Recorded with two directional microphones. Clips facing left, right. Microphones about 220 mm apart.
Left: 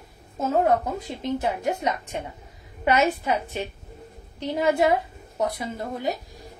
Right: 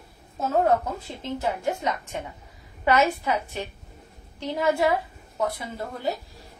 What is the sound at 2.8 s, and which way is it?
A woman's voice, 15° left (ahead or behind).